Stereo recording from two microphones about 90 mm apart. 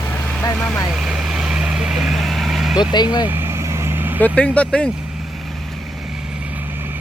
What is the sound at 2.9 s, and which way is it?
Speech, 55° left (ahead or behind).